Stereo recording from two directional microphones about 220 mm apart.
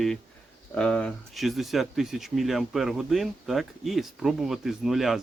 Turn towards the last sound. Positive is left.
turn(degrees=0)  # may be behind; listen again after turning